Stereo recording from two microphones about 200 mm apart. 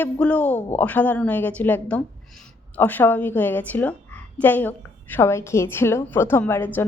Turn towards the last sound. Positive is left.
turn(degrees=10)  # may be behind; listen again after turning